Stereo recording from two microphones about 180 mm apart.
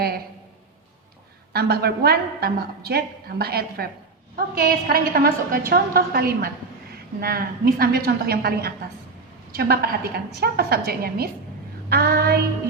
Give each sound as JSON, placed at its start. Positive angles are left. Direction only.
{"t": 1.5, "sound": "a woman's voice", "side_deg": -60}